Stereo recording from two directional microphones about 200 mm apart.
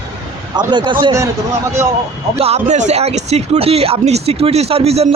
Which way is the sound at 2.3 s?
30° right (ahead or behind).